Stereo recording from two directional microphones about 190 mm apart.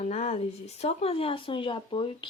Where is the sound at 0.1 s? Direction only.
35° left (ahead or behind).